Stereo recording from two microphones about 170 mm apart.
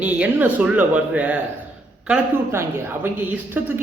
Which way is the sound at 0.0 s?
10° right (ahead or behind).